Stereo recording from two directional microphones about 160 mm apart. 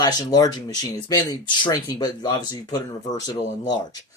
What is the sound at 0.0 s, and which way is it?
Speech, 25° left (ahead or behind).